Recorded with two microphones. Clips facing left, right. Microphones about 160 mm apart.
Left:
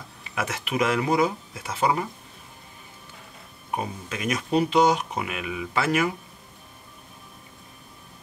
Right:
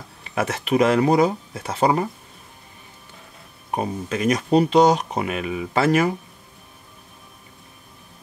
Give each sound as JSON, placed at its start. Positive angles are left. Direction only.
{"t": 0.3, "sound": "speech", "side_deg": -35}
{"t": 3.7, "sound": "speech", "side_deg": -35}